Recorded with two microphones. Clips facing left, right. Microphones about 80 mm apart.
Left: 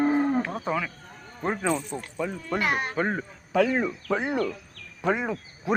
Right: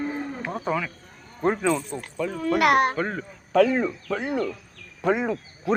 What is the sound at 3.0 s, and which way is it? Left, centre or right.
Speech, left.